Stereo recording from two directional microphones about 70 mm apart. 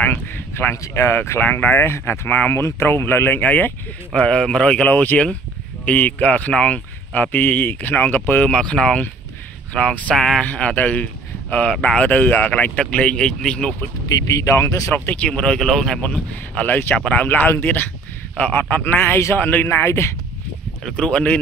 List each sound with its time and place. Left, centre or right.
0.0 s speech: left
1.4 s speech: left
2.5 s speech: left
4.1 s speech: centre
4.8 s speech: left
8.5 s speech: centre
10.1 s speech: centre
10.5 s speech: left
14.0 s speech: left
15.0 s speech: centre
16.0 s speech: left
18.5 s speech: left
19.4 s speech: left
20.9 s speech: centre